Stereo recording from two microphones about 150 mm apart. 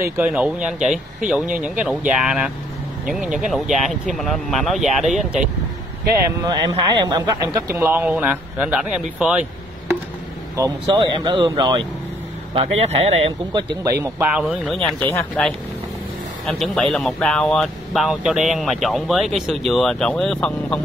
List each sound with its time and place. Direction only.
0.0 s speech: 20° right (ahead or behind)
0.3 s speech: 5° right (ahead or behind)
6.4 s speech: 25° right (ahead or behind)
7.7 s speech: 10° right (ahead or behind)
10.5 s speech: 20° right (ahead or behind)
12.5 s speech: 45° right (ahead or behind)
14.4 s speech: 5° right (ahead or behind)
15.0 s speech: 15° left (ahead or behind)
16.4 s speech: centre (ahead or behind)